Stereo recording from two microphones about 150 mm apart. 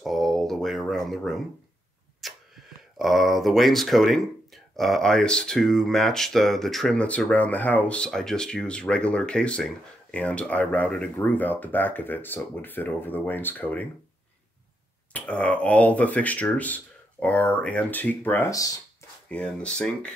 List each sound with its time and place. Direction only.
0.0 s a sound: centre (ahead or behind)
3.0 s speech: centre (ahead or behind)
15.1 s speech: 10° left (ahead or behind)